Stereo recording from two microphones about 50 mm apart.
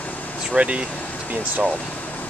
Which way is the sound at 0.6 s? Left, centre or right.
Right.